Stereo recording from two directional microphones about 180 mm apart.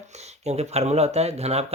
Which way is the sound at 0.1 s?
40° right (ahead or behind).